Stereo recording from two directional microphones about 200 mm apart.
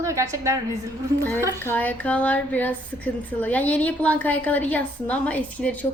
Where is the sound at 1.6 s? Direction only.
10° left (ahead or behind).